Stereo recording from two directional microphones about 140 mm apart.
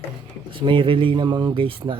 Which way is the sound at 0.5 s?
35° right (ahead or behind).